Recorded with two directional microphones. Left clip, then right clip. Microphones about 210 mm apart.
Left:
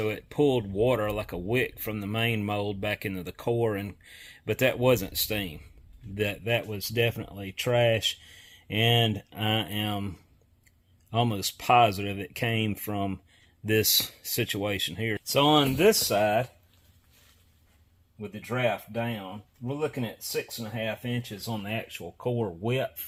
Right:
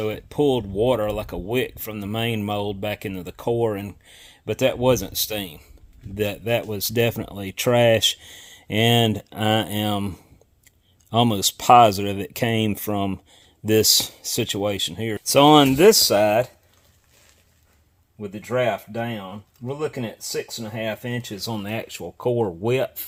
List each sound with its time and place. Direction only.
0.0 s speech: 20° right (ahead or behind)
15.2 s speech: 55° right (ahead or behind)
18.2 s speech: 60° right (ahead or behind)